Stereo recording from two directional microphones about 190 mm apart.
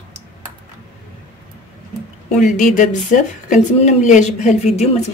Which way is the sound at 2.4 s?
40° left (ahead or behind).